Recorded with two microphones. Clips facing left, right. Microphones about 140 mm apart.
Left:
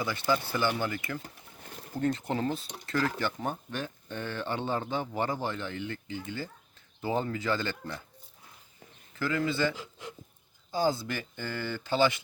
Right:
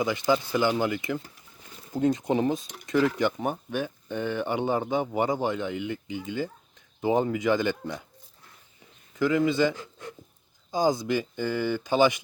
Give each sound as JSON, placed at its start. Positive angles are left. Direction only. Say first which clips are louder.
{"t": 0.0, "sound": "speech", "louder": "right 5 dB", "side_deg": -15}
{"t": 1.6, "sound": "bird", "louder": "left 3 dB", "side_deg": 55}
{"t": 1.9, "sound": "speech", "louder": "right 6 dB", "side_deg": -15}
{"t": 9.1, "sound": "speech", "louder": "right 7 dB", "side_deg": -20}